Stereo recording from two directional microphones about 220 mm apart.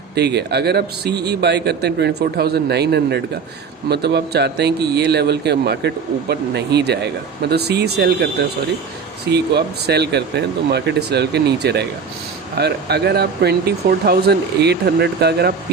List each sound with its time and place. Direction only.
0.2 s a man's voice: 50° right (ahead or behind)